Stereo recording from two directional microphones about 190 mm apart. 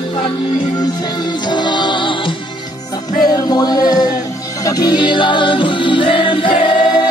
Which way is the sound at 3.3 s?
20° left (ahead or behind).